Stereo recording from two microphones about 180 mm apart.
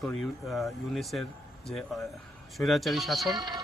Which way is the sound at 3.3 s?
20° right (ahead or behind).